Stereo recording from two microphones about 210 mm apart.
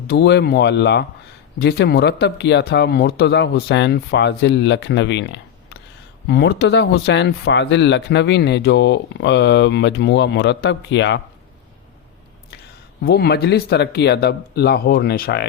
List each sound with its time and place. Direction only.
0.1 s speech: 55° left (ahead or behind)
13.0 s speech: 50° left (ahead or behind)